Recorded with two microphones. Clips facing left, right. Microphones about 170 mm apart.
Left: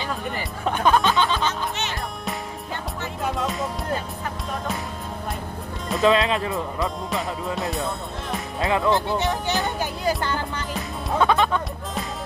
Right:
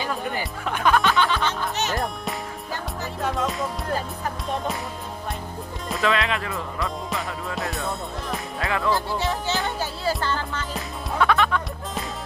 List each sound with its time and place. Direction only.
0.8 s music: 20° left (ahead or behind)
3.3 s music: centre (ahead or behind)
5.9 s speech: 20° left (ahead or behind)
6.8 s music: centre (ahead or behind)
8.5 s speech: 20° left (ahead or behind)
11.1 s music: 20° left (ahead or behind)